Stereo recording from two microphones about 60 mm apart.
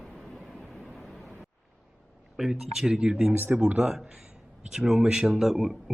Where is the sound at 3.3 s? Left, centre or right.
Right.